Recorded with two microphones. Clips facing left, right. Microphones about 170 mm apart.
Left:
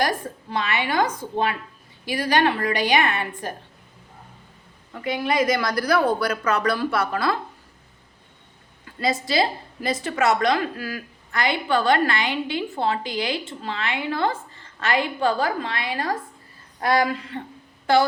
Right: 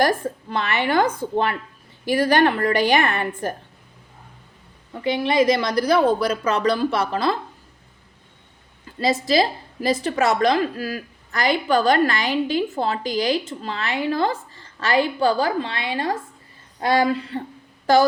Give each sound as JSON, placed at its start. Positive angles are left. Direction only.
{"t": 0.5, "sound": "a woman's voice", "side_deg": -50}
{"t": 2.0, "sound": "a woman's voice", "side_deg": -45}
{"t": 4.9, "sound": "speech", "side_deg": -25}
{"t": 9.0, "sound": "a woman's voice", "side_deg": -35}